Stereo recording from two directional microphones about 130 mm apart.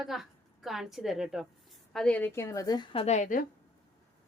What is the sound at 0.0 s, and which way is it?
A woman's voice, centre (ahead or behind).